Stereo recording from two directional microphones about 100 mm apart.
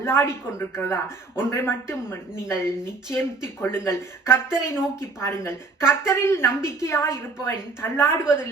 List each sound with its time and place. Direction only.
0.0 s speech: 25° left (ahead or behind)